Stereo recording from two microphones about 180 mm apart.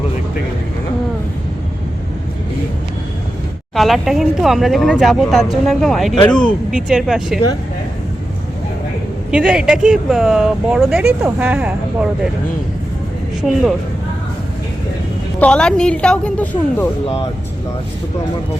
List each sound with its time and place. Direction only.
3.8 s speech: centre (ahead or behind)
9.3 s speech: 5° right (ahead or behind)
13.4 s speech: centre (ahead or behind)
15.4 s speech: 5° left (ahead or behind)